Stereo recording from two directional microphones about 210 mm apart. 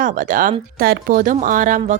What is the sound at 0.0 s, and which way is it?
A woman's voice, 40° right (ahead or behind).